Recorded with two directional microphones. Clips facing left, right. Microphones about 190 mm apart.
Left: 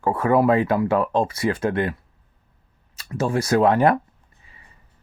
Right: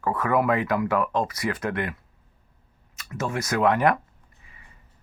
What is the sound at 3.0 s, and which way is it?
Speech, 30° left (ahead or behind).